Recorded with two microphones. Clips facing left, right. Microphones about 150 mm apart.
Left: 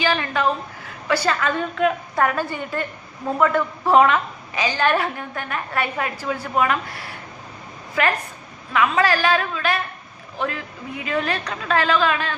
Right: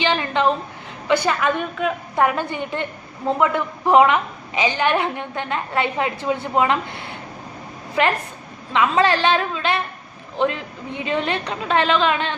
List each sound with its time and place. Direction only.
0.0 s a woman's voice: 25° right (ahead or behind)